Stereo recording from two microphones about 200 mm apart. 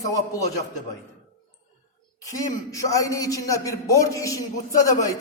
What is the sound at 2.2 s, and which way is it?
A man's voice, 15° left (ahead or behind).